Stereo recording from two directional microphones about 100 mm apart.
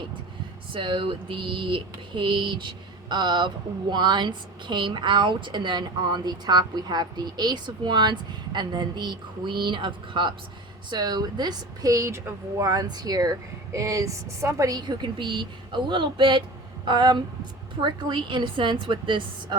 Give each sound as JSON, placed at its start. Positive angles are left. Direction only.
{"t": 0.7, "sound": "speech", "side_deg": -55}